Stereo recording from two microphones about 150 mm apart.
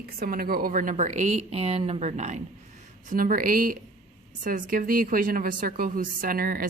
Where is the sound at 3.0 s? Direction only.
65° right (ahead or behind).